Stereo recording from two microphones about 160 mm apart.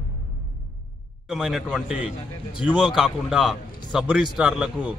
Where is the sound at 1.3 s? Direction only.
5° right (ahead or behind).